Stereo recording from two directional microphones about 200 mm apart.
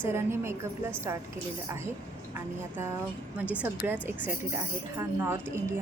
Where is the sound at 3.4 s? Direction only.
10° right (ahead or behind).